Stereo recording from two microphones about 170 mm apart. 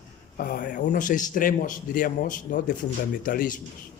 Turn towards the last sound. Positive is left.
turn(degrees=55)  # may be behind; listen again after turning